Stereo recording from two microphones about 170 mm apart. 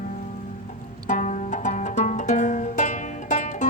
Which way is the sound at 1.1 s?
45° left (ahead or behind).